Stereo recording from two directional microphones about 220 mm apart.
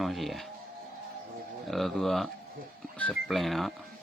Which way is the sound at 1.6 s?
Centre (ahead or behind).